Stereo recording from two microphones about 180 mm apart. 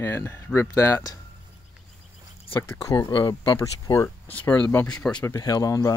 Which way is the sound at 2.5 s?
15° left (ahead or behind).